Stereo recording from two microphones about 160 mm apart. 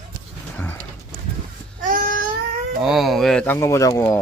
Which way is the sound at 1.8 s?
60° right (ahead or behind).